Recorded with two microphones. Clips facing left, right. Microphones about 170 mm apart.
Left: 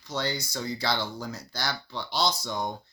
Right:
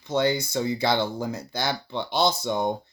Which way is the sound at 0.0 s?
55° right (ahead or behind).